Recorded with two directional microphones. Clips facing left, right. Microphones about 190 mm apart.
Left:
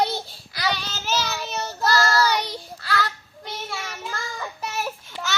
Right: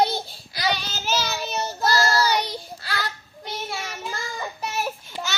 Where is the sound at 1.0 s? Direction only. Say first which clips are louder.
Even; 35° right (ahead or behind).